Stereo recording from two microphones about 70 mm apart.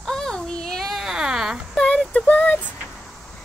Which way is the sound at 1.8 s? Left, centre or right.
Centre.